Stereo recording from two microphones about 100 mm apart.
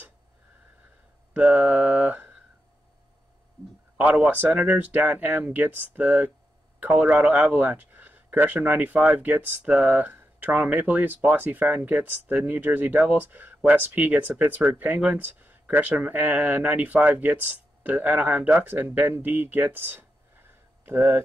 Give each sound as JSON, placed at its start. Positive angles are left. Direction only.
{"t": 1.3, "sound": "mantra", "side_deg": -15}
{"t": 4.0, "sound": "speech", "side_deg": -10}